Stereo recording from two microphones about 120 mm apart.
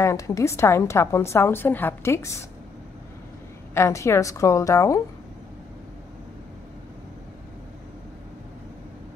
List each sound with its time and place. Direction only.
0.0 s a woman's voice: 25° left (ahead or behind)
3.7 s a woman's voice: 25° left (ahead or behind)